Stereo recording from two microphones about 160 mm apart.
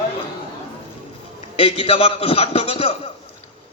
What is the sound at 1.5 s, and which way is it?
A man's voice, 35° left (ahead or behind).